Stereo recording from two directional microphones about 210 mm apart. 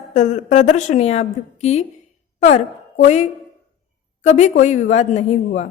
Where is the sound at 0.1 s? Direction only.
35° left (ahead or behind).